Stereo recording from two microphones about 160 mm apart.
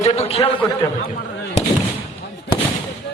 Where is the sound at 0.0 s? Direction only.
40° left (ahead or behind).